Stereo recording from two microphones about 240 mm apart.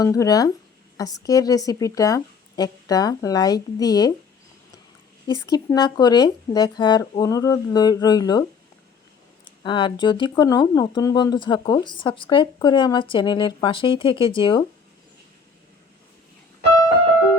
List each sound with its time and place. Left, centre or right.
0.0 s speech: centre
5.5 s speech: centre
9.6 s speech: centre